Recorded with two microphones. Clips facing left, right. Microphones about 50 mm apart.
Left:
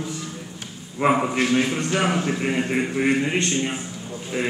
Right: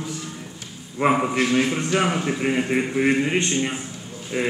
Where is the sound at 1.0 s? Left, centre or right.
Centre.